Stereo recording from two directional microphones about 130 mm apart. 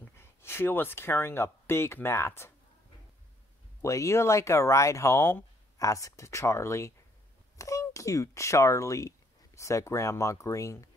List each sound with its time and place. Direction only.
0.0 s speech: 20° left (ahead or behind)
3.8 s speech: 25° left (ahead or behind)